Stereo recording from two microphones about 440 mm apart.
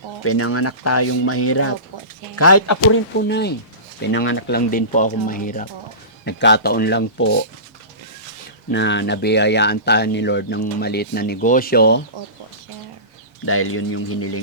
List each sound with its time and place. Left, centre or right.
0.3 s speech: left
3.2 s speech: left
8.7 s speech: left
13.4 s speech: left